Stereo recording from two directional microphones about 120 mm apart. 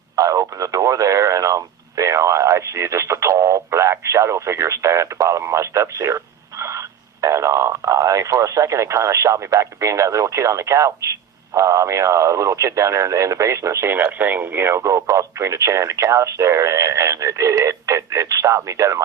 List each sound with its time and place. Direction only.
0.2 s speech: 30° right (ahead or behind)